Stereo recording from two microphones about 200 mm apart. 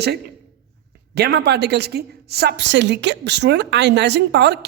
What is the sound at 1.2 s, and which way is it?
Speech, 55° right (ahead or behind).